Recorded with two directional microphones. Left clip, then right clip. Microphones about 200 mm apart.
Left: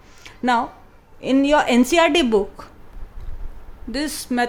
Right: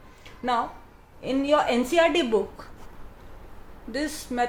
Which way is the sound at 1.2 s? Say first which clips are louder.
Left 5 dB; 50° left (ahead or behind).